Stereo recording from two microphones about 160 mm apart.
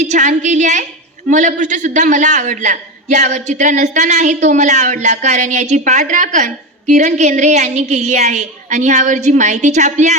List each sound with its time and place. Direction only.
0.0 s a man's voice: 50° right (ahead or behind)